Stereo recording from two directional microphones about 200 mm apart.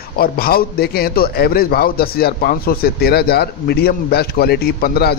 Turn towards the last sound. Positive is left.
turn(degrees=50)  # may be behind; listen again after turning